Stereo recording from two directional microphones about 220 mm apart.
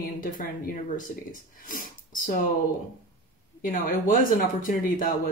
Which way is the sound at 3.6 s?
40° left (ahead or behind).